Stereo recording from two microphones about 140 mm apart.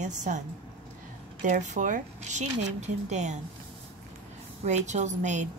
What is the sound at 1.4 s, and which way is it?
A woman's voice, 60° right (ahead or behind).